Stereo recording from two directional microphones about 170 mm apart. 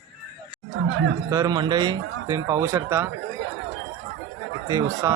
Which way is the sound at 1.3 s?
20° right (ahead or behind).